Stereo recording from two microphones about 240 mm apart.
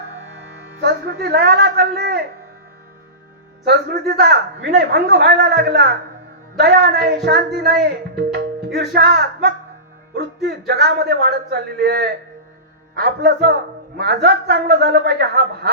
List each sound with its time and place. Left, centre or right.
0.8 s speech: right
3.6 s a man's voice: right